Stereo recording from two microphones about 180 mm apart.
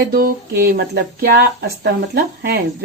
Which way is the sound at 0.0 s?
60° right (ahead or behind).